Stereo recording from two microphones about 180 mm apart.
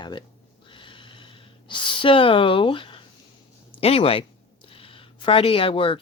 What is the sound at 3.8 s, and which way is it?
Speech, 30° left (ahead or behind).